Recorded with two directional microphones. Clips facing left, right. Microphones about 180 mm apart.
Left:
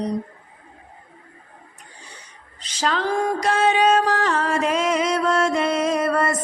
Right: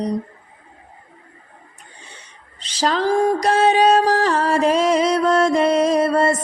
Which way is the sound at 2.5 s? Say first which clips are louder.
Right 4 dB; 30° right (ahead or behind).